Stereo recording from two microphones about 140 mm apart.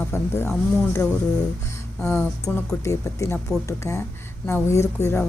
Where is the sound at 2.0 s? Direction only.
5° left (ahead or behind).